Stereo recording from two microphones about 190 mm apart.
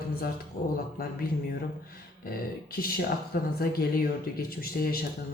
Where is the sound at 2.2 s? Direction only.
50° left (ahead or behind).